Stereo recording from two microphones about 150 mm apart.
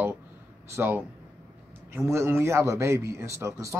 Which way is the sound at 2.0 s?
15° right (ahead or behind).